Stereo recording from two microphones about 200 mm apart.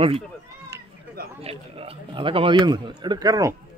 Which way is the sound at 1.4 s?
30° right (ahead or behind).